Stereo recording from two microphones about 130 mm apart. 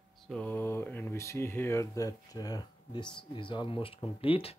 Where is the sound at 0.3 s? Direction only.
10° left (ahead or behind); by 4.6 s 45° left (ahead or behind).